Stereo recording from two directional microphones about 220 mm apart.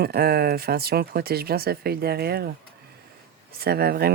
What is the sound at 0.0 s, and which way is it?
Speech, 45° right (ahead or behind).